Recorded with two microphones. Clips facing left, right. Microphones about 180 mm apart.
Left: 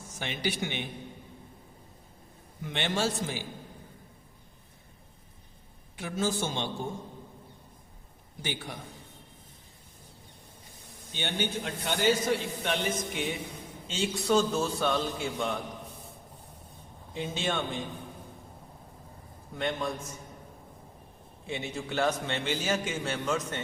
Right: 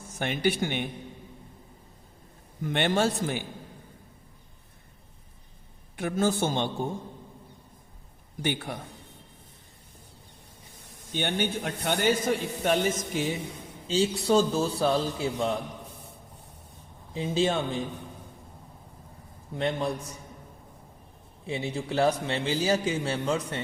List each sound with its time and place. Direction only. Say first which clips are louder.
0.2 s speech: right 6 dB; 55° right (ahead or behind)
2.6 s a man's voice: right 5 dB; 55° right (ahead or behind)
6.0 s a man's voice: right 5 dB; 55° right (ahead or behind)
8.4 s a man's voice: right 6 dB; 55° right (ahead or behind)
11.1 s a man's voice: right 4 dB; 55° right (ahead or behind); by 15.5 s 35° right (ahead or behind)
17.2 s a man's voice: right 6 dB; 35° right (ahead or behind)
19.5 s a man's voice: right 3 dB; 35° right (ahead or behind)
21.4 s a man's voice: right 4 dB; 35° right (ahead or behind)